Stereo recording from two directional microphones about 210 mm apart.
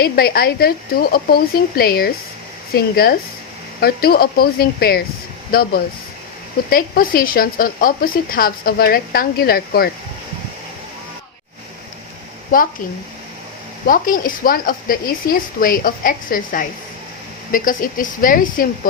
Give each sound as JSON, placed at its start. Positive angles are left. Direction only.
{"t": 0.0, "sound": "speech", "side_deg": 45}
{"t": 13.8, "sound": "a woman's voice", "side_deg": 40}